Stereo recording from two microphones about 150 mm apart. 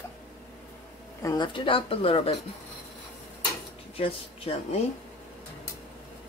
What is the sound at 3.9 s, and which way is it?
Speech, 40° left (ahead or behind).